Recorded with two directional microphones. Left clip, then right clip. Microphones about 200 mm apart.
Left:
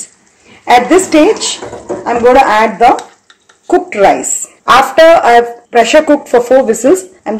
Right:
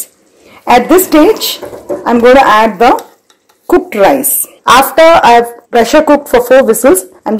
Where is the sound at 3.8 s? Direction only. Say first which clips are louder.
Left 1 dB; 45° right (ahead or behind).